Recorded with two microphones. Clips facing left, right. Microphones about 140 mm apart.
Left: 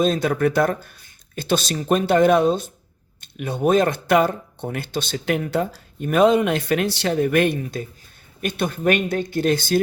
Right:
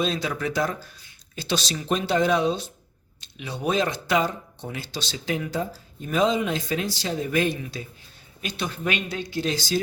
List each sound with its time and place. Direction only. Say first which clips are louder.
0.0 s speech: left 7 dB; 50° left (ahead or behind)
7.6 s speech: left 6 dB; 50° left (ahead or behind)